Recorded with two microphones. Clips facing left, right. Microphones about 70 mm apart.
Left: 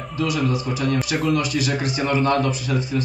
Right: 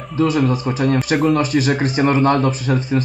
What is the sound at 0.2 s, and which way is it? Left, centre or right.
A man's voice, right.